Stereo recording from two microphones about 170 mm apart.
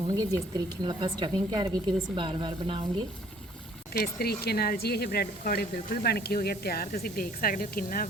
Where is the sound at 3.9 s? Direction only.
65° left (ahead or behind).